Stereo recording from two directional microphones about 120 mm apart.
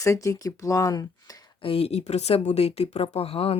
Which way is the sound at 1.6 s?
55° left (ahead or behind).